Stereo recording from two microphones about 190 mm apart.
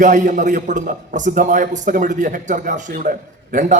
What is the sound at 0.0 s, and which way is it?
A man's voice, 40° right (ahead or behind).